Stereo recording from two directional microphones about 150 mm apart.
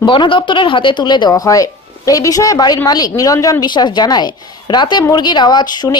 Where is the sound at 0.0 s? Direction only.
35° left (ahead or behind).